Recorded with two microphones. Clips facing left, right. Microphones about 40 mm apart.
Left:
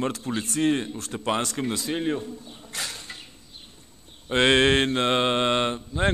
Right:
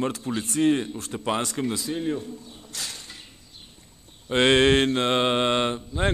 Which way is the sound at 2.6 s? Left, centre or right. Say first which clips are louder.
Left 2 dB; centre.